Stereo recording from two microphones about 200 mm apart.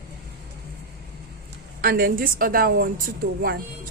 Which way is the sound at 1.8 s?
45° right (ahead or behind).